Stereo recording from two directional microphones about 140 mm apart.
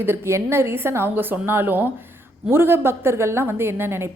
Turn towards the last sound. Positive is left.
turn(degrees=-15)  # may be behind; listen again after turning